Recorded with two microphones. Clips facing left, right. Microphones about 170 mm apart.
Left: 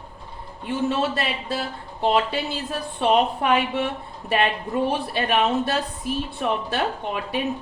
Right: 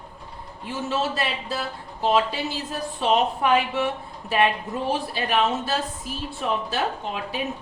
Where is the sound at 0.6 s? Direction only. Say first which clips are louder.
Left 3 dB; 60° left (ahead or behind).